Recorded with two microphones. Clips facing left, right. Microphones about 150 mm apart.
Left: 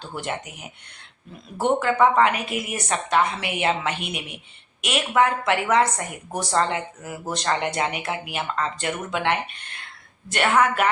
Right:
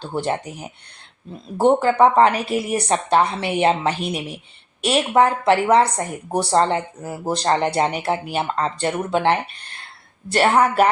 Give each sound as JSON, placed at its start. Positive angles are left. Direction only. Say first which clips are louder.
{"t": 0.0, "sound": "speech", "louder": "right 7 dB", "side_deg": -30}